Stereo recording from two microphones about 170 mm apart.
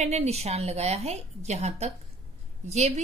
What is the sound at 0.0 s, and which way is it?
A woman's voice, 40° right (ahead or behind).